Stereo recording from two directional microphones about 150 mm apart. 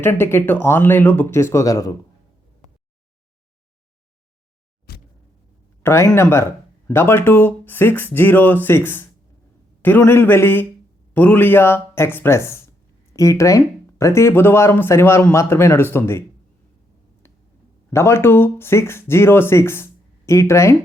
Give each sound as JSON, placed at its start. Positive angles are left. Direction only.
{"t": 0.0, "sound": "speech", "side_deg": 15}
{"t": 5.8, "sound": "speech", "side_deg": 20}
{"t": 17.9, "sound": "speech", "side_deg": 15}